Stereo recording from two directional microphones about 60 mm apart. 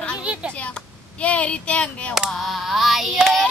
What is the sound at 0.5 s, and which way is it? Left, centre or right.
Speech, left.